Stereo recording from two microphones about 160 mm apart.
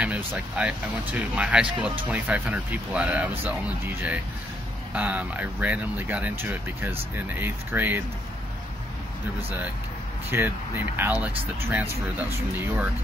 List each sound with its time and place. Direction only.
0.0 s speech: 10° right (ahead or behind)
10.3 s speech: 15° right (ahead or behind)